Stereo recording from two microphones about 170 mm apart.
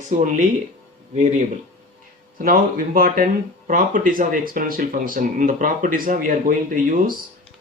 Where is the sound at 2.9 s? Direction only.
55° right (ahead or behind).